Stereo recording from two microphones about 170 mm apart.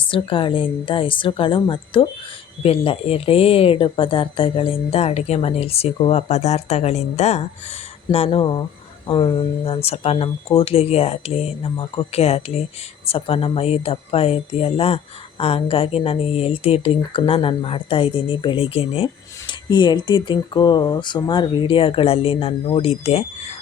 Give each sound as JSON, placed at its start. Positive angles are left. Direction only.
{"t": 0.1, "sound": "a woman's voice", "side_deg": 30}